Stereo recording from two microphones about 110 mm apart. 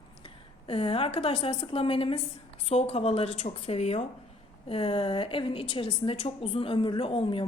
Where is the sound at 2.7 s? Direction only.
70° left (ahead or behind).